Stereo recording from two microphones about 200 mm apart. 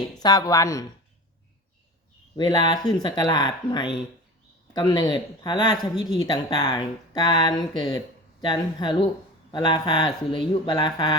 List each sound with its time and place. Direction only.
0.2 s speech: 20° left (ahead or behind)
2.4 s speech: 20° left (ahead or behind)